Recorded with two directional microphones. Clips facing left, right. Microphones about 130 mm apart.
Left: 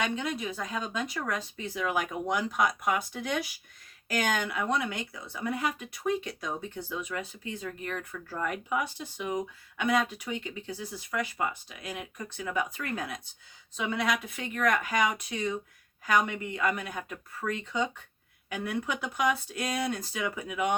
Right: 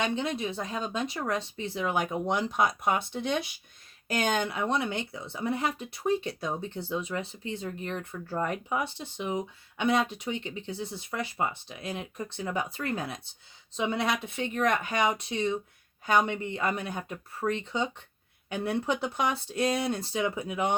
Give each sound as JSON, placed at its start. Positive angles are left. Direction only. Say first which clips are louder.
{"t": 0.0, "sound": "speech", "louder": "right 2 dB", "side_deg": -30}